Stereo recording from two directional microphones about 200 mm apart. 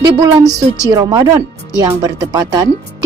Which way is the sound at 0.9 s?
20° right (ahead or behind).